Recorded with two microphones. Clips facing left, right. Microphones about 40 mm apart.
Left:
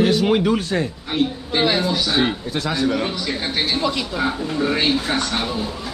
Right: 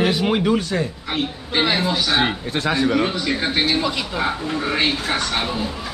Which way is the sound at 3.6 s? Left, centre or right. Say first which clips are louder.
Right 1 dB; centre.